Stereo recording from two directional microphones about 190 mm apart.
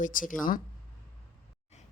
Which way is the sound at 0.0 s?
45° left (ahead or behind).